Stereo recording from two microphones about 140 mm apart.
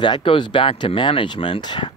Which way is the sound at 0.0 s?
35° left (ahead or behind).